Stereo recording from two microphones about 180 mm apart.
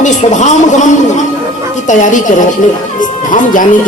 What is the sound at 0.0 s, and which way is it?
Speech, 45° left (ahead or behind).